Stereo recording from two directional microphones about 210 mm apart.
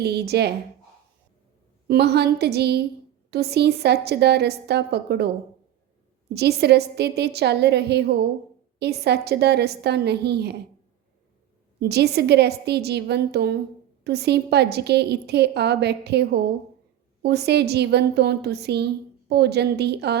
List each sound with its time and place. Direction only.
0.0 s a woman's voice: 50° right (ahead or behind)
1.9 s a woman's voice: 50° right (ahead or behind)
6.3 s a woman's voice: 50° right (ahead or behind)
11.8 s a woman's voice: 50° right (ahead or behind)